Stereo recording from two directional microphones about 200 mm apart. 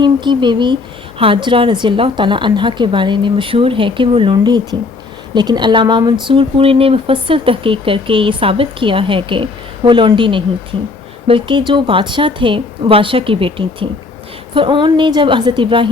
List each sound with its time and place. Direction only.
0.0 s speech: 25° right (ahead or behind)